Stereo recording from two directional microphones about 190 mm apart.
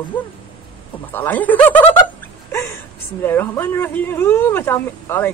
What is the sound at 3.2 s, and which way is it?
Speech, 10° left (ahead or behind).